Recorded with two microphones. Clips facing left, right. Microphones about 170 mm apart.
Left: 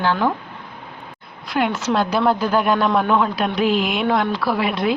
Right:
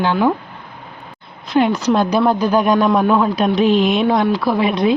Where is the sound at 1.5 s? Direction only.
20° right (ahead or behind).